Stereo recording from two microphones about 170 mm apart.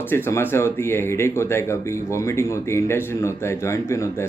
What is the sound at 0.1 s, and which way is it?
Speech, 15° left (ahead or behind).